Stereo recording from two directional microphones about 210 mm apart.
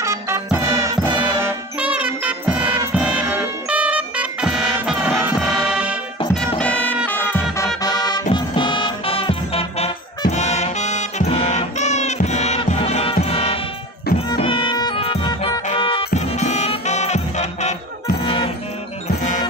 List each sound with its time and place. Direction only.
0.0 s music: 15° right (ahead or behind); by 18.5 s 25° left (ahead or behind)